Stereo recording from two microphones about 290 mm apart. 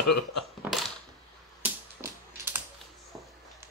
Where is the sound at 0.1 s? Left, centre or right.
Left.